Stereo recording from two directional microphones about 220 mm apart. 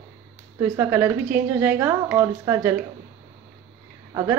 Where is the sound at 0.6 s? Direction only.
10° right (ahead or behind).